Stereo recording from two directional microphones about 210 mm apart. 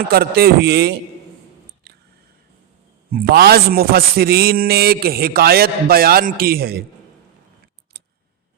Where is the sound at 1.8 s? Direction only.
55° right (ahead or behind).